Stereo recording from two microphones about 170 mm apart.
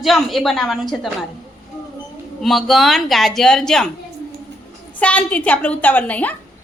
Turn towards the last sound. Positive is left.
turn(degrees=10)  # may be behind; listen again after turning